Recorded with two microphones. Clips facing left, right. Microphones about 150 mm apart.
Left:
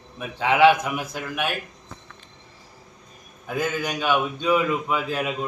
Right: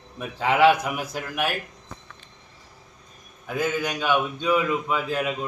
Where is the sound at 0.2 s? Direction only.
5° right (ahead or behind).